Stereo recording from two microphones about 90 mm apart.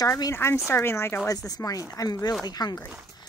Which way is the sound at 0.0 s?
35° left (ahead or behind).